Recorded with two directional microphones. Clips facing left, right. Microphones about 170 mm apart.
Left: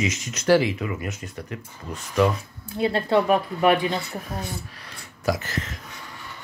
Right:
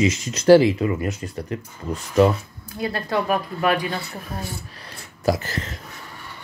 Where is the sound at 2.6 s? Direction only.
25° left (ahead or behind).